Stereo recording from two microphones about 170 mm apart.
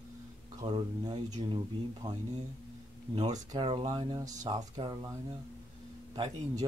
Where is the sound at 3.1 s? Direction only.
45° right (ahead or behind).